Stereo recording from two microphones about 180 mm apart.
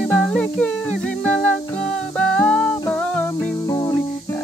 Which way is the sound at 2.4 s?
5° left (ahead or behind).